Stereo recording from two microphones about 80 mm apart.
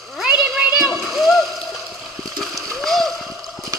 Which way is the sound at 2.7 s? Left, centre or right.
Centre.